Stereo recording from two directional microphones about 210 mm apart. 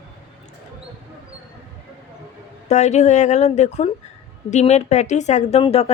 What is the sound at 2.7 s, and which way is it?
A woman's voice, 35° left (ahead or behind).